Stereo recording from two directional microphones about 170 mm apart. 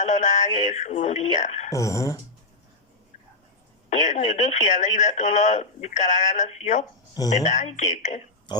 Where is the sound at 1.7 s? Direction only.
20° left (ahead or behind).